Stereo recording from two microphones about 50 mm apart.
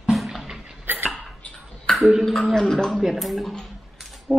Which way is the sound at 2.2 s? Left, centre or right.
Centre.